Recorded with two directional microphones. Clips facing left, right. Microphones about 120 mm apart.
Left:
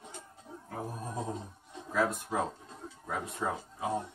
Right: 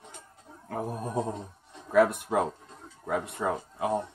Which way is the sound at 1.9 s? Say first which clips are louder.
Right 8 dB; 65° right (ahead or behind).